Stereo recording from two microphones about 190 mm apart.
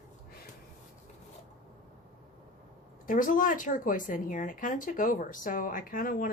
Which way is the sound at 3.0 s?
45° left (ahead or behind).